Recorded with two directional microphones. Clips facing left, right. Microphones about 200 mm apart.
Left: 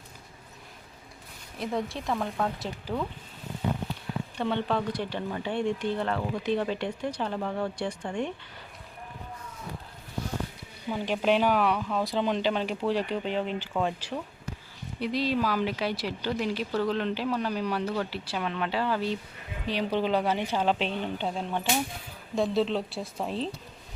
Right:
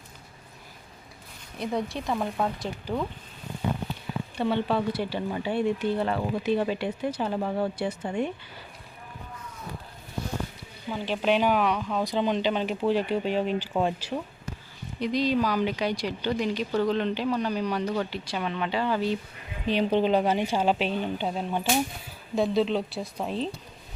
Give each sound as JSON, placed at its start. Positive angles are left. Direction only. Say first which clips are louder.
{"t": 1.5, "sound": "speech", "louder": "right 2 dB", "side_deg": 0}
{"t": 4.4, "sound": "speech", "louder": "right 3 dB", "side_deg": -5}
{"t": 10.9, "sound": "speech", "louder": "even", "side_deg": 10}
{"t": 14.9, "sound": "speech", "louder": "right 3 dB", "side_deg": 5}
{"t": 19.6, "sound": "speech", "louder": "right 4 dB", "side_deg": -20}